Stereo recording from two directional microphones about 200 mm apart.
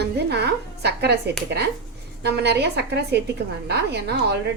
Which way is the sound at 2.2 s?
55° right (ahead or behind).